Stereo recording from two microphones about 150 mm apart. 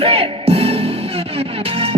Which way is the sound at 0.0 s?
40° right (ahead or behind).